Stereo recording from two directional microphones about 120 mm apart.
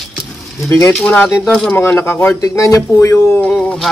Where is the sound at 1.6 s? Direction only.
15° left (ahead or behind).